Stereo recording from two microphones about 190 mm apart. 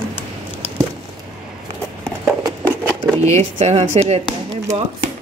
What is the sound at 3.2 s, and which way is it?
Speech, 35° right (ahead or behind).